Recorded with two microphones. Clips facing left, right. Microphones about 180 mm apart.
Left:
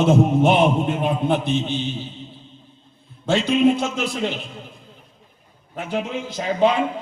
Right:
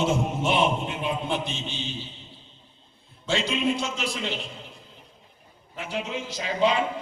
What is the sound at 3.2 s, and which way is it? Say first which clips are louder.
A man's voice: left 8 dB; 50° left (ahead or behind).